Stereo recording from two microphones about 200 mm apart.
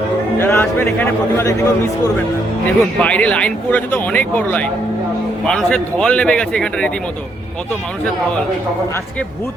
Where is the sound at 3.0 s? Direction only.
5° left (ahead or behind).